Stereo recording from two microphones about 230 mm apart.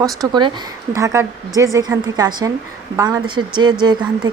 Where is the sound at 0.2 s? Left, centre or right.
Centre.